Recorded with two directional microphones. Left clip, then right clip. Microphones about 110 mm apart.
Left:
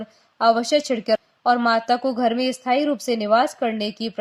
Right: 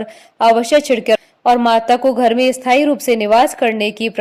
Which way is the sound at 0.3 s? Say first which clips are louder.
Right 7 dB; 45° right (ahead or behind).